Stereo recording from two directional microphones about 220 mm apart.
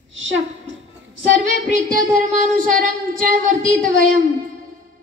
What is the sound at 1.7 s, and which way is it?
Speech, 35° right (ahead or behind).